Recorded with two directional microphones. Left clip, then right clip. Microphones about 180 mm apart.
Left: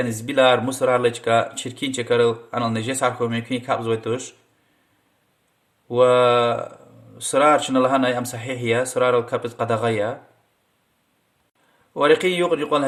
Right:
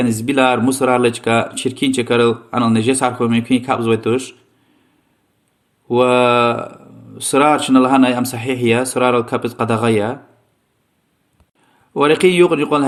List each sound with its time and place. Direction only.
0.0 s speech: 25° right (ahead or behind)
5.9 s speech: 25° right (ahead or behind)
11.9 s speech: 30° right (ahead or behind)